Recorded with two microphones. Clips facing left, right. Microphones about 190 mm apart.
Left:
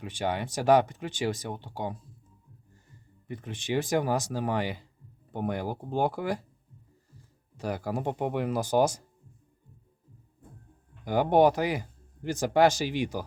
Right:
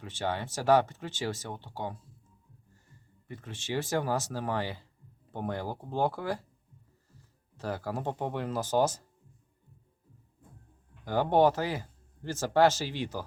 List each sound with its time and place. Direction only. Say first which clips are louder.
0.0 s speech: left 3 dB; 15° left (ahead or behind)
3.2 s speech: left 5 dB; 15° left (ahead or behind)
7.5 s speech: left 3 dB; 15° left (ahead or behind)
11.0 s speech: left 3 dB; 15° left (ahead or behind)